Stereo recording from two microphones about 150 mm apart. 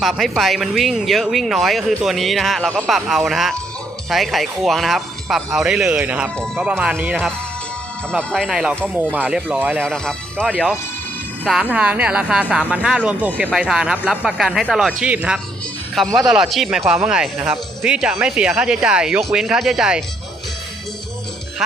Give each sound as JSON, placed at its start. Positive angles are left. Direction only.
{"t": 0.0, "sound": "speech", "side_deg": 0}
{"t": 8.1, "sound": "speech", "side_deg": 5}
{"t": 9.8, "sound": "speech", "side_deg": 5}